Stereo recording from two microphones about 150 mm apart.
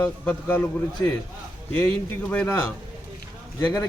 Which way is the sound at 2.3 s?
10° left (ahead or behind).